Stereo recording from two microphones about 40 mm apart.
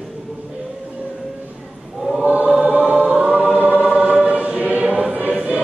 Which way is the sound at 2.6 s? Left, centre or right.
Right.